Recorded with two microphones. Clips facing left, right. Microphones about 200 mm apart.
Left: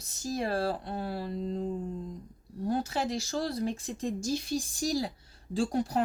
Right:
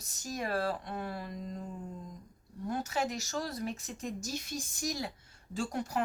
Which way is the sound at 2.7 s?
30° left (ahead or behind).